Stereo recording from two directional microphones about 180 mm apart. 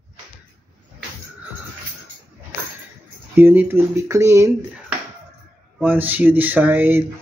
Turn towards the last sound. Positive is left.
turn(degrees=-10)  # may be behind; listen again after turning